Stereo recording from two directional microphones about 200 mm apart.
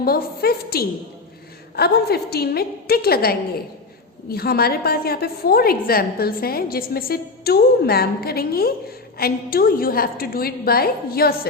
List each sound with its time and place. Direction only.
0.0 s a woman's voice: 50° left (ahead or behind)